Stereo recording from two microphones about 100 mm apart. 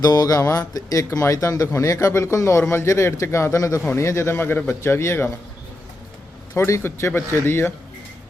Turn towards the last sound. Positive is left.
turn(degrees=25)  # may be behind; listen again after turning